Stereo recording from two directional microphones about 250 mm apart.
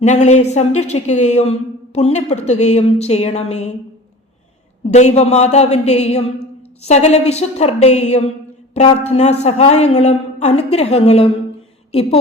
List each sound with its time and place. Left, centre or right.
0.0 s a woman's voice: left
4.9 s a woman's voice: left